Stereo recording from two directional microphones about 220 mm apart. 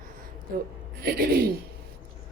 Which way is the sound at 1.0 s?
45° right (ahead or behind).